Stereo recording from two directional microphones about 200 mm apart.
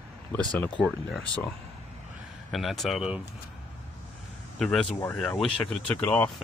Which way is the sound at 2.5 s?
Centre (ahead or behind).